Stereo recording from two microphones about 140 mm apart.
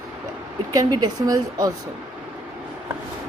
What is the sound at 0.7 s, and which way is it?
Speech, 30° right (ahead or behind).